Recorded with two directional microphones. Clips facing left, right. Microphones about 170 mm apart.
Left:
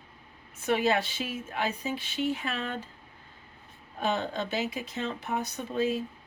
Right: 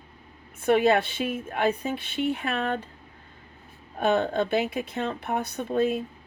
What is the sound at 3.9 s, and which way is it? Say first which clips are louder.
Speech: right 7 dB; 55° right (ahead or behind).